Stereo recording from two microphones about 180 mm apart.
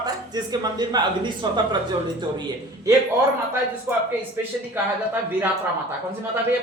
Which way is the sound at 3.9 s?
15° right (ahead or behind).